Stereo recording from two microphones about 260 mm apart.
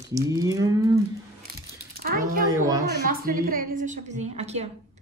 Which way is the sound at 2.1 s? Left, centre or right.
Right.